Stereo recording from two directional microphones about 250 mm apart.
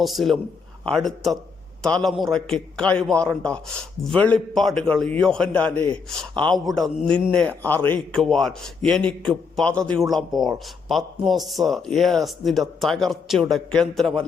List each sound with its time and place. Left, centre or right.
0.0 s a man's voice: centre